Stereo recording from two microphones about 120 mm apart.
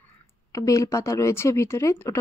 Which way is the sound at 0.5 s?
30° left (ahead or behind).